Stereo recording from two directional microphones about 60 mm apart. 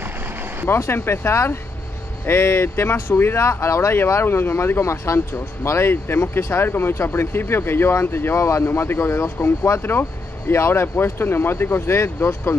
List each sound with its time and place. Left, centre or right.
0.7 s speech: left